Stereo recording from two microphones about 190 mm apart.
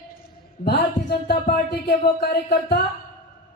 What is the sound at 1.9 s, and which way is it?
Speech, 60° left (ahead or behind).